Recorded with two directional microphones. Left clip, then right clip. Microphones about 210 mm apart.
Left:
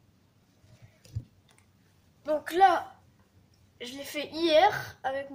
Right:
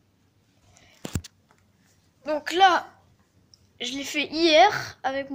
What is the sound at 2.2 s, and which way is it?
A woman's voice, 20° right (ahead or behind).